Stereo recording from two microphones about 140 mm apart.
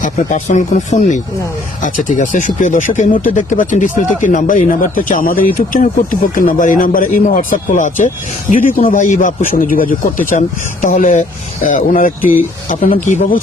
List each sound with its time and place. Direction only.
0.0 s speech: 65° left (ahead or behind); by 5.4 s 80° left
5.5 s speech: 70° left (ahead or behind)